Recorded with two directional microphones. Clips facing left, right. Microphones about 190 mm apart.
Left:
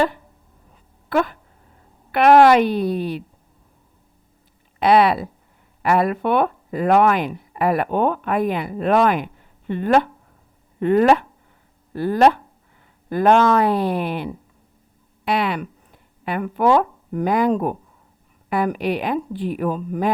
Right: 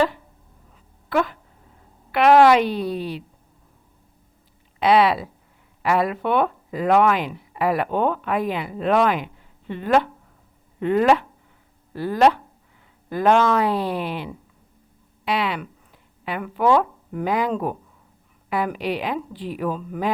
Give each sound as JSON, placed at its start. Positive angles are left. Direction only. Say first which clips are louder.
{"t": 2.1, "sound": "speech", "louder": "left 2 dB", "side_deg": 50}
{"t": 4.8, "sound": "speech", "louder": "left 2 dB", "side_deg": 50}